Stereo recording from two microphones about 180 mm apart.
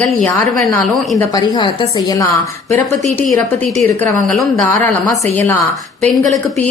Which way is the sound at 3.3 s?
10° left (ahead or behind).